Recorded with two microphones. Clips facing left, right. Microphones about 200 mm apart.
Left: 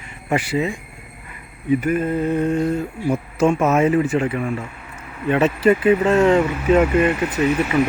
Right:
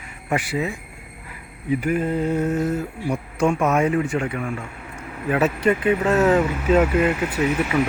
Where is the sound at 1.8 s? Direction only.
15° right (ahead or behind).